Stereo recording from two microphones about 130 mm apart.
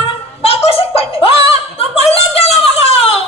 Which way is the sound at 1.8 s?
50° left (ahead or behind).